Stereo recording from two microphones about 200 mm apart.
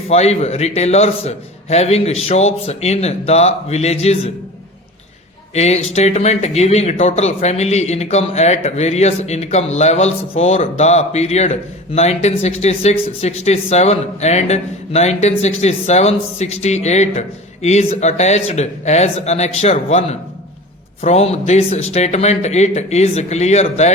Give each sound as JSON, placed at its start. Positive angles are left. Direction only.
{"t": 0.1, "sound": "speech", "side_deg": 30}
{"t": 5.5, "sound": "speech", "side_deg": 35}